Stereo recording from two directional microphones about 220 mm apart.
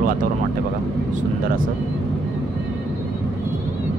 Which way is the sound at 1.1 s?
40° right (ahead or behind).